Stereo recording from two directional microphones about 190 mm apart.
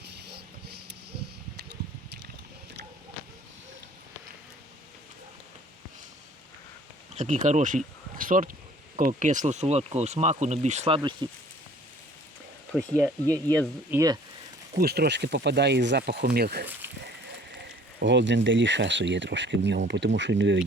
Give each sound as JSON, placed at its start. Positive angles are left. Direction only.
{"t": 0.3, "sound": "a sound", "side_deg": -60}
{"t": 7.1, "sound": "speech", "side_deg": -35}
{"t": 12.7, "sound": "speech", "side_deg": -15}
{"t": 14.8, "sound": "speech", "side_deg": -55}
{"t": 18.0, "sound": "speech", "side_deg": -70}